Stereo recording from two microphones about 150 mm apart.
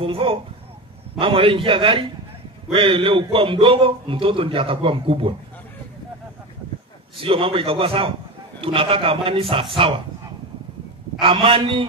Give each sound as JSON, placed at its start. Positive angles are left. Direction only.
{"t": 0.0, "sound": "a sound", "side_deg": -40}
{"t": 1.2, "sound": "a man's voice", "side_deg": -40}
{"t": 7.2, "sound": "a man's voice", "side_deg": -40}
{"t": 11.1, "sound": "a man's voice", "side_deg": -35}